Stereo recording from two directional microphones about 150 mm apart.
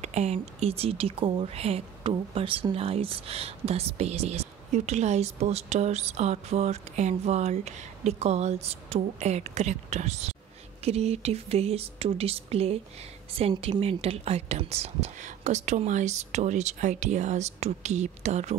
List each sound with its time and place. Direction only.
0.0 s speech: 50° right (ahead or behind)